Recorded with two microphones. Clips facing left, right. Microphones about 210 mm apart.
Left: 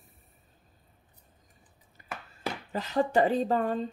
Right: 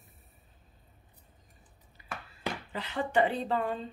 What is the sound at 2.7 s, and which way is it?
Speech, 40° left (ahead or behind).